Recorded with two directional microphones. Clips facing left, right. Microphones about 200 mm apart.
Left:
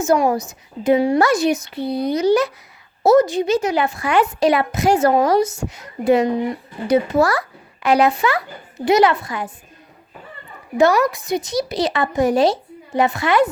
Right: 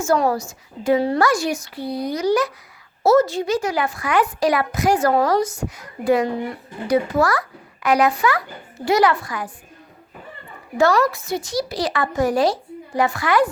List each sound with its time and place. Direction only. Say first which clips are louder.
0.0 s a child's voice: left 2 dB; 15° left (ahead or behind)
10.8 s a child's voice: left 2 dB; 20° left (ahead or behind)